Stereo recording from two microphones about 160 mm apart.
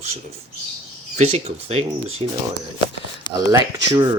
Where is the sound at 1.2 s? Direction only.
40° right (ahead or behind).